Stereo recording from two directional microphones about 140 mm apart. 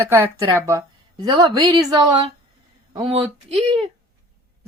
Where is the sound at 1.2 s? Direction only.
30° right (ahead or behind).